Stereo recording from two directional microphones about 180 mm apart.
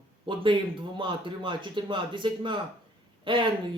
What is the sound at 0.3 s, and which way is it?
Speech, 25° right (ahead or behind).